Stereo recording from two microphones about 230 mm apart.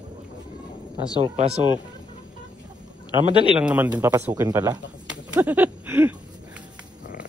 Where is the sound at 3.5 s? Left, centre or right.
Centre.